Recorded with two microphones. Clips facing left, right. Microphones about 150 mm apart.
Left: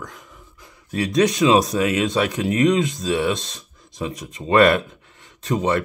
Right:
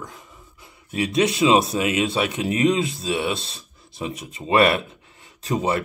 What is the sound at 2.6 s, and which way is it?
Speech, 30° right (ahead or behind).